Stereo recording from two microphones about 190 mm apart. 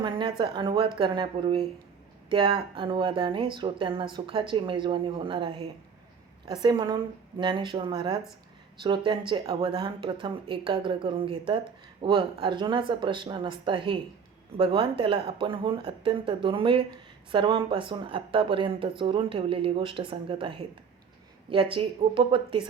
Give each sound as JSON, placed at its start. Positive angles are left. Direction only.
{"t": 0.0, "sound": "speech", "side_deg": -25}
{"t": 21.8, "sound": "speech", "side_deg": -25}